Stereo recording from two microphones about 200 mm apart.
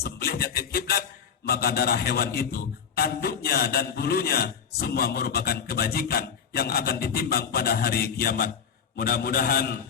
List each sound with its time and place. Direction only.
0.0 s a man's voice: 50° left (ahead or behind)